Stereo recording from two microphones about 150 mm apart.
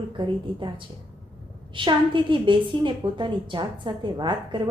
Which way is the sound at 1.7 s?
35° right (ahead or behind).